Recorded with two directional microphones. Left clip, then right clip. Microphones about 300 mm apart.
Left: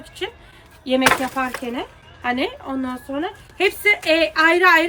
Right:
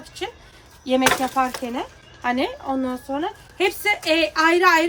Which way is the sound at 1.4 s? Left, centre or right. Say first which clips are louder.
Right 2 dB; centre.